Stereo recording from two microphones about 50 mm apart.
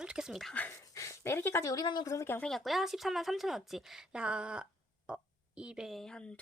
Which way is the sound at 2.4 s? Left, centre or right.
Centre.